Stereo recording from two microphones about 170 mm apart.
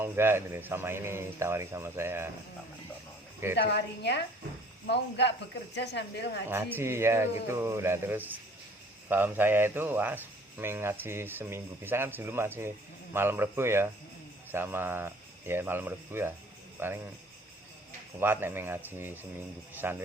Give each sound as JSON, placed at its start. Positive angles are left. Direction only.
{"t": 0.0, "sound": "a man's voice", "side_deg": -15}
{"t": 3.7, "sound": "speech", "side_deg": 80}
{"t": 6.5, "sound": "a man's voice", "side_deg": -15}
{"t": 18.2, "sound": "a man's voice", "side_deg": -15}